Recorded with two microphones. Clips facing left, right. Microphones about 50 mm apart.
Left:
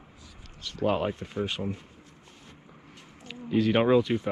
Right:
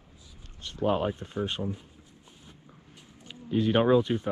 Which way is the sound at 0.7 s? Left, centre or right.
Left.